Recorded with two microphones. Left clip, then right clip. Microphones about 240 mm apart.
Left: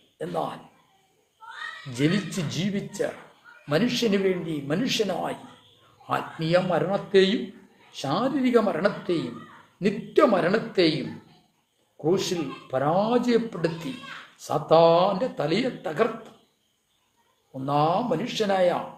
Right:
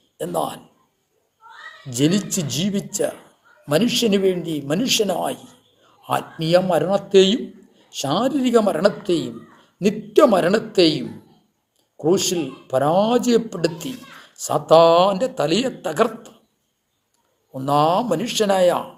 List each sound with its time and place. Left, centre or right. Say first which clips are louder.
0.2 s a man's voice: right 6 dB; right
1.9 s a man's voice: right 6 dB; right
11.9 s a man's voice: right 6 dB; right
17.5 s a man's voice: right 6 dB; right